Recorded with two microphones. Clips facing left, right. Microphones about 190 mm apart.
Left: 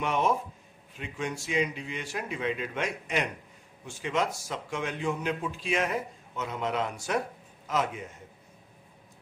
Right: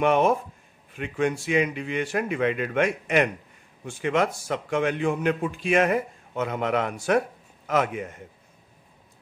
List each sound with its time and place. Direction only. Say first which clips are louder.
0.0 s a man's voice: right 7 dB; 60° right (ahead or behind)